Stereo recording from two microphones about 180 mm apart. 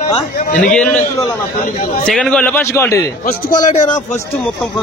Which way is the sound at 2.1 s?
5° left (ahead or behind).